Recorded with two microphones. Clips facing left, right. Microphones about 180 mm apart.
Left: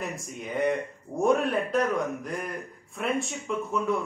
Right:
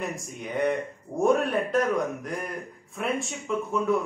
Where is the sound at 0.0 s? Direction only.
Centre (ahead or behind).